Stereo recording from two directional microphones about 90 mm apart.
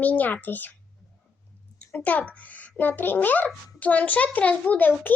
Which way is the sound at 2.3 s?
15° left (ahead or behind).